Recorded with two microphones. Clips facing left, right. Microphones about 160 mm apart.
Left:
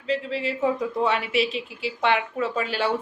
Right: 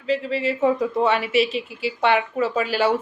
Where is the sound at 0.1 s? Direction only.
Centre (ahead or behind).